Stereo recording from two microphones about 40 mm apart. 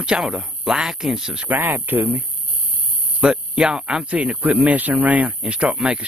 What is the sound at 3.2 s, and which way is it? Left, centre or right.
Speech, right.